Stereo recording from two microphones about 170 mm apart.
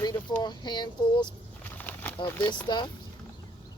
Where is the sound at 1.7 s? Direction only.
10° left (ahead or behind).